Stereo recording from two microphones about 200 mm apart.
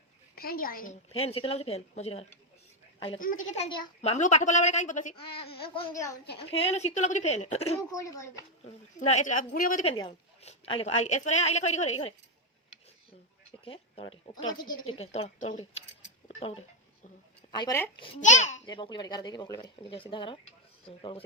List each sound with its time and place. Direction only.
0.3 s a woman's voice: 45° left (ahead or behind)
1.1 s a woman's voice: 30° left (ahead or behind)
3.2 s a woman's voice: 40° left (ahead or behind)
5.1 s a woman's voice: 25° left (ahead or behind)
7.8 s speech: 15° left (ahead or behind)
8.6 s a woman's voice: 35° left (ahead or behind)
9.8 s a woman's voice: 25° left (ahead or behind)
13.7 s speech: 30° left (ahead or behind)
16.4 s a sound: 30° left (ahead or behind)
17.5 s speech: 20° left (ahead or behind)
18.2 s a woman's voice: 35° left (ahead or behind)
18.6 s speech: 20° left (ahead or behind)